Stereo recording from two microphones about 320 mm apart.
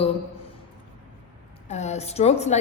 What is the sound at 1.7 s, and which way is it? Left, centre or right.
Speech, left.